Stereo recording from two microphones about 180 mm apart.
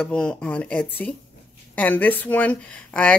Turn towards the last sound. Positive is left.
turn(degrees=5)  # may be behind; listen again after turning